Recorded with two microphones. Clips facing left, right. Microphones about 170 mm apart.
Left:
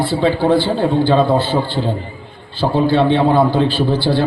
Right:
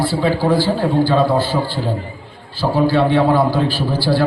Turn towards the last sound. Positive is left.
turn(degrees=25)  # may be behind; listen again after turning